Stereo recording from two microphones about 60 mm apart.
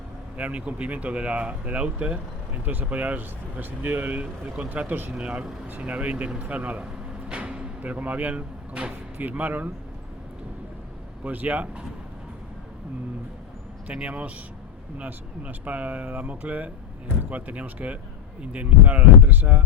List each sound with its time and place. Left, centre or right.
0.3 s speech: right
5.1 s speech: centre
11.2 s speech: right
13.8 s speech: centre